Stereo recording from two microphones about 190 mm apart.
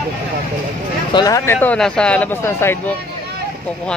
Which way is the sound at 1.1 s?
20° left (ahead or behind).